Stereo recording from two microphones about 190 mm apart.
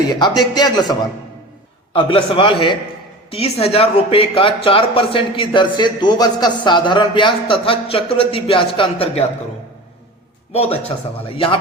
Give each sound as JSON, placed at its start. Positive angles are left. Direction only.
{"t": 0.2, "sound": "speech", "side_deg": 20}
{"t": 10.5, "sound": "a man's voice", "side_deg": 35}